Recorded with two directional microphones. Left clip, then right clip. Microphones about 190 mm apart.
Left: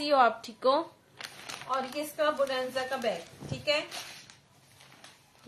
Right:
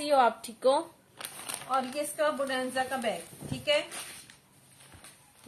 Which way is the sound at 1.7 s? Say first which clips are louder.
Right 2 dB; 35° left (ahead or behind).